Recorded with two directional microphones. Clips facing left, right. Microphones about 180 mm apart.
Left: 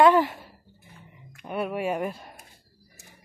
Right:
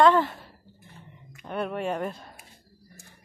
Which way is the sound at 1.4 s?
10° left (ahead or behind).